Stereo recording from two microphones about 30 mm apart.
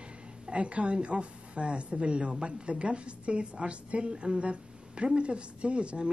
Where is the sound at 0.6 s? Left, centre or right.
Right.